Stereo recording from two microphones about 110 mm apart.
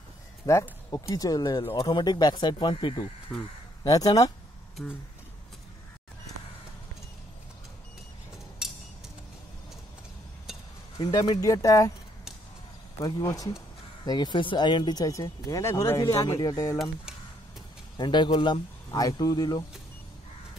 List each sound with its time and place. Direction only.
0.5 s speech: 30° left (ahead or behind)
1.6 s speech: 45° left (ahead or behind)
3.3 s speech: 5° left (ahead or behind)
3.8 s speech: 35° left (ahead or behind)
11.0 s speech: 40° left (ahead or behind)
13.0 s speech: 30° left (ahead or behind)
17.9 s speech: 45° left (ahead or behind)